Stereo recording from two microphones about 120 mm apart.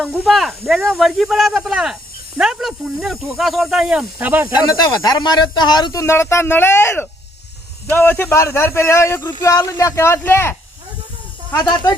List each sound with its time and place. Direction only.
0.0 s speech: centre (ahead or behind)
5.0 s speech: 35° left (ahead or behind); by 10.5 s 20° left (ahead or behind)
11.6 s speech: 35° left (ahead or behind)